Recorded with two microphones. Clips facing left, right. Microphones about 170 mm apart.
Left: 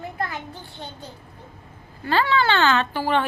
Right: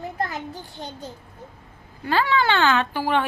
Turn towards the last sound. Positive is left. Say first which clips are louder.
# even
turn(degrees=-10)  # may be behind; listen again after turning